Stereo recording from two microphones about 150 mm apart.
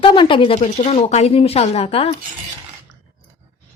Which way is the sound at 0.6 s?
45° left (ahead or behind).